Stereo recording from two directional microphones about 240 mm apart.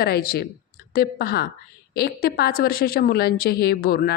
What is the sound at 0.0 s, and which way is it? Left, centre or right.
A woman's voice, left.